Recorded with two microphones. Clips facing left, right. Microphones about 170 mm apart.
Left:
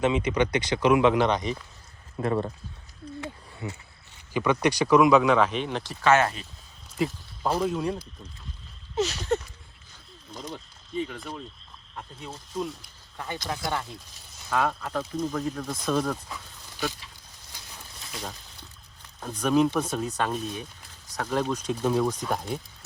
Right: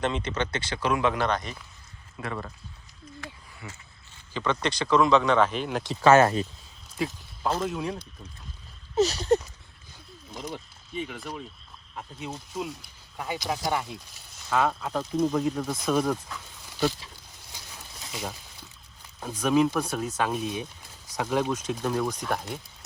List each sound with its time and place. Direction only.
0.0 s speech: 5° left (ahead or behind)
2.2 s speech: 35° left (ahead or behind)
3.2 s a sound: 25° left (ahead or behind)
4.4 s speech: 15° left (ahead or behind); by 5.8 s 5° right (ahead or behind)
5.8 s speech: 20° right (ahead or behind)
6.1 s a sound: 40° right (ahead or behind)
7.4 s speech: 10° left (ahead or behind)
9.0 s a sound: 35° right (ahead or behind)
10.3 s speech: 10° right (ahead or behind)
18.1 s speech: 10° right (ahead or behind)